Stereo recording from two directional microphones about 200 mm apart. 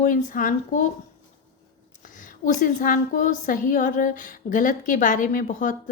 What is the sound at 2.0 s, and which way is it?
A woman's voice, 40° left (ahead or behind).